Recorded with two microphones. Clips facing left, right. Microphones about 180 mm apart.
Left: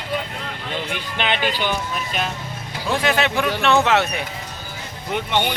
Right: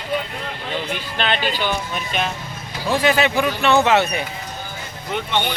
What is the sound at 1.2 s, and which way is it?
Speech, 15° left (ahead or behind).